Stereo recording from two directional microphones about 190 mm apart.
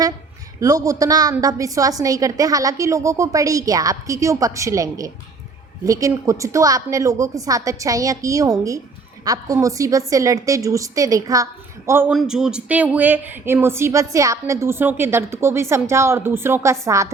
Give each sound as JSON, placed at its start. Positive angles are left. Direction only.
{"t": 0.6, "sound": "speech", "side_deg": -20}